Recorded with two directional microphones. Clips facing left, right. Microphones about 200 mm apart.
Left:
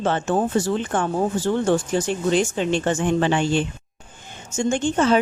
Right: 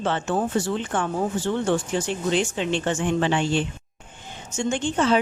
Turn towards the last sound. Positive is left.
turn(degrees=45)  # may be behind; listen again after turning